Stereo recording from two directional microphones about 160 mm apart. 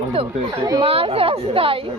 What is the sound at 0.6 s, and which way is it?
Speech, 25° right (ahead or behind).